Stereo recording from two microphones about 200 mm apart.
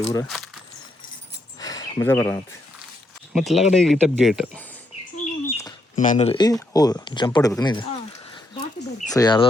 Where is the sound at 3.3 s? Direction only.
Centre (ahead or behind).